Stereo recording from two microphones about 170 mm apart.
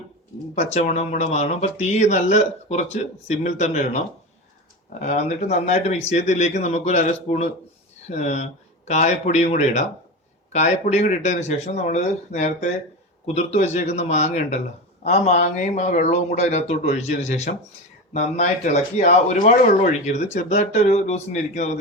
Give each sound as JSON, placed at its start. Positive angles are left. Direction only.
{"t": 0.5, "sound": "speech", "side_deg": 40}
{"t": 4.9, "sound": "speech", "side_deg": 45}